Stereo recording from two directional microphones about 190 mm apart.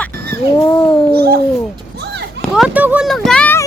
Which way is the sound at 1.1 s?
55° right (ahead or behind).